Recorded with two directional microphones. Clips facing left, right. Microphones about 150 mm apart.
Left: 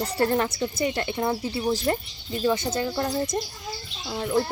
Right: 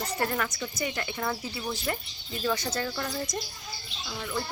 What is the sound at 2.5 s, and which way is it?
Speech, 25° left (ahead or behind).